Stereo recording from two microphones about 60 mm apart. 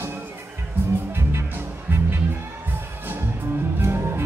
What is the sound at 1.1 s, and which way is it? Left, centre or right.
Music, right.